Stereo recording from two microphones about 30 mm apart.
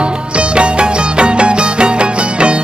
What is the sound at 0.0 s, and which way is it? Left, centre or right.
Music, right.